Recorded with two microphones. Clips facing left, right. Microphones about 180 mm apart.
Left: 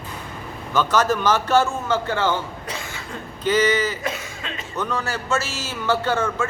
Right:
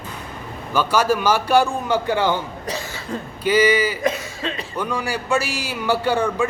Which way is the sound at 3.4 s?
10° right (ahead or behind).